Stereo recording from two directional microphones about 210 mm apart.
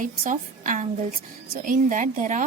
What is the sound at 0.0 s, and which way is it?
A woman's voice, 40° right (ahead or behind).